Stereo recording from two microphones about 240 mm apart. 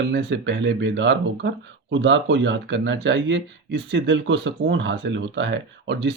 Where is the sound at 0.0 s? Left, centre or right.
Right.